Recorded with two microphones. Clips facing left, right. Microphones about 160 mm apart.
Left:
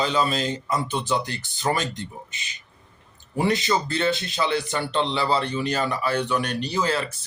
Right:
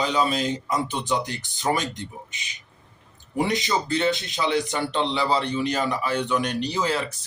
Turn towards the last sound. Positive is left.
turn(degrees=-15)  # may be behind; listen again after turning